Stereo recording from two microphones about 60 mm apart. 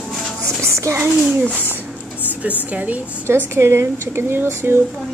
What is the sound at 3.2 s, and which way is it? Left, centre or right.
Speech, right.